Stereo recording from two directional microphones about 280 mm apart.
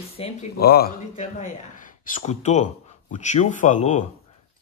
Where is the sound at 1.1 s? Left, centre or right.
Left.